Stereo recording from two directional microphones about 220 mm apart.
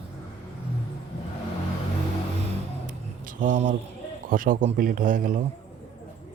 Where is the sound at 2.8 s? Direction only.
35° right (ahead or behind).